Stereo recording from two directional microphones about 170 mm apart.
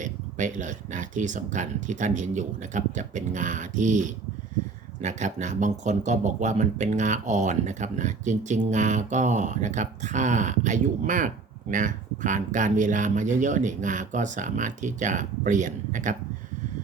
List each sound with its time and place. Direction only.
0.0 s speech: 45° right (ahead or behind)